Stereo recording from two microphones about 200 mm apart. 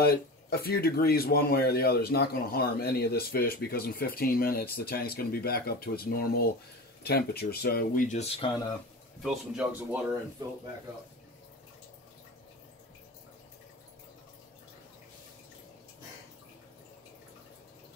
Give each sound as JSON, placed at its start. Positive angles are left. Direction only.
{"t": 0.0, "sound": "speech", "side_deg": 50}
{"t": 9.2, "sound": "speech", "side_deg": -5}